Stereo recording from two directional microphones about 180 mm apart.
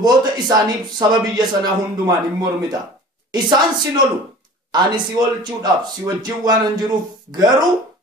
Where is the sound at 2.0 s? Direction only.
20° right (ahead or behind).